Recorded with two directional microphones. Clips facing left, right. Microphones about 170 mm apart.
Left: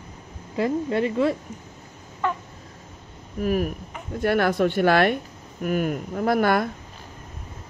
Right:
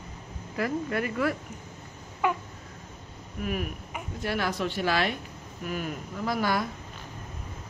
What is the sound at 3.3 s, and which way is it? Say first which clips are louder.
Speech: left 8 dB; 40° left (ahead or behind).